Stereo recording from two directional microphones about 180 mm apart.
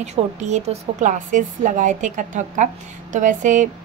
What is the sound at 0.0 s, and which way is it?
A woman's voice, 40° right (ahead or behind).